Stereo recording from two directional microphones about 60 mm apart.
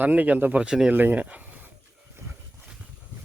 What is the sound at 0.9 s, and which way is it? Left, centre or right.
Speech, right.